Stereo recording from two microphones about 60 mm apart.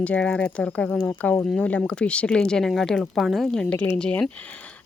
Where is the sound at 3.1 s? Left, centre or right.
Centre.